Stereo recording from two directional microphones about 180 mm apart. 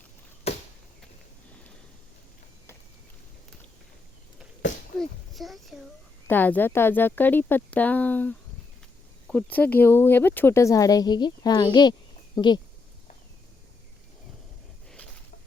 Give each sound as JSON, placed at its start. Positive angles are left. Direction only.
{"t": 0.5, "sound": "chop", "side_deg": 35}
{"t": 4.9, "sound": "a child's voice", "side_deg": 0}